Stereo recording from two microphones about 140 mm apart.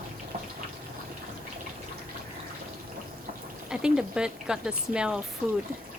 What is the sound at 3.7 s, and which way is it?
Speech, 5° right (ahead or behind).